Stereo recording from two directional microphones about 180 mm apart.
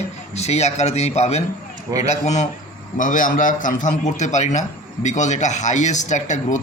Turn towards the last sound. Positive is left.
turn(degrees=40)  # may be behind; listen again after turning